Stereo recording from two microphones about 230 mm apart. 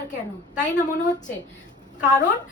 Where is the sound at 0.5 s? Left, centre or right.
Left.